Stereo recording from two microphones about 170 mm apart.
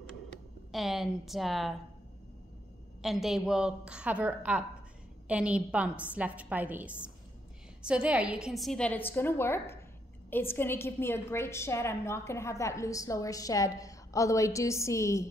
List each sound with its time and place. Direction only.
0.7 s a woman's voice: centre (ahead or behind)
3.0 s a woman's voice: centre (ahead or behind); by 15.2 s 20° left (ahead or behind)